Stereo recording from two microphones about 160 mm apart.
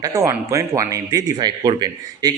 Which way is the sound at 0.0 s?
20° right (ahead or behind).